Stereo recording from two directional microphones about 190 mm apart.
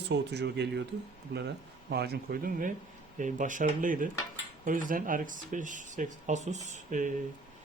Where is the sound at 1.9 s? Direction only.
55° right (ahead or behind).